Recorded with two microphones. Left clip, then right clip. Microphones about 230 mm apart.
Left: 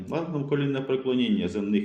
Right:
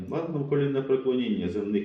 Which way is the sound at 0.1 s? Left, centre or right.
Left.